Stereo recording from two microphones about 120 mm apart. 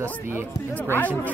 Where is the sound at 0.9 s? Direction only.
15° left (ahead or behind).